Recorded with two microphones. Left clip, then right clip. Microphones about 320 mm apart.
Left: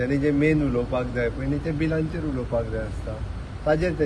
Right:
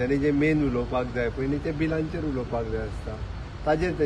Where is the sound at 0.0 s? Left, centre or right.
Centre.